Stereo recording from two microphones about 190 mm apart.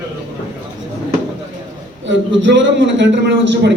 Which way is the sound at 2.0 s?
70° right (ahead or behind).